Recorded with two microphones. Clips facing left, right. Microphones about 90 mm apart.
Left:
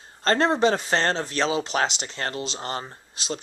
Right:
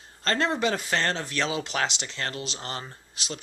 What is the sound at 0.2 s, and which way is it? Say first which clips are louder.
Speech: left 5 dB; 30° left (ahead or behind).